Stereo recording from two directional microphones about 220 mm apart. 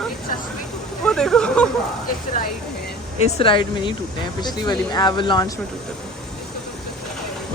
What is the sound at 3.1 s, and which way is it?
Speech, 25° left (ahead or behind).